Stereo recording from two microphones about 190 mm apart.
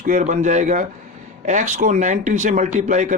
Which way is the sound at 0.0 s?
45° right (ahead or behind).